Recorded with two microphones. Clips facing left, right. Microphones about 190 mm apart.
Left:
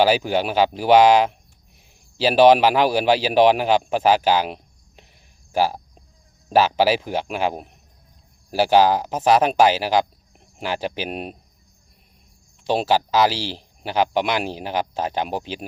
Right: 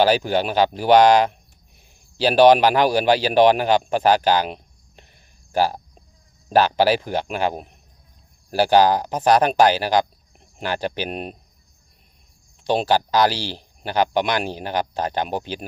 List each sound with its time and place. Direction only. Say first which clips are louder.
0.0 s speech: even; 5° left (ahead or behind)
12.6 s speech: even; 5° left (ahead or behind)